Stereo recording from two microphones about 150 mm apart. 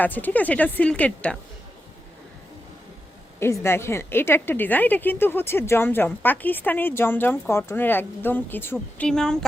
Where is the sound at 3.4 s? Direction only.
15° left (ahead or behind).